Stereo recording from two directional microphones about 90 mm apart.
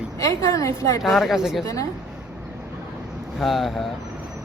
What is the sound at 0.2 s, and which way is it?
Speech, 35° left (ahead or behind).